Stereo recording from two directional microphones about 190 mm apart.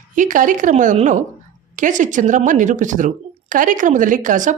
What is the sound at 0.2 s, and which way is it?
Speech, 45° right (ahead or behind).